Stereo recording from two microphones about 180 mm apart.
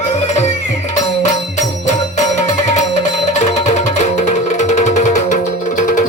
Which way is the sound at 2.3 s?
40° left (ahead or behind).